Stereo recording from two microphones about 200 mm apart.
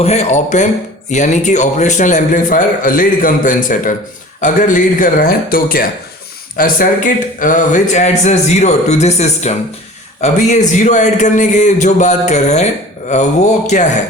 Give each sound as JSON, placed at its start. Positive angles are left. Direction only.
{"t": 0.0, "sound": "speech", "side_deg": 35}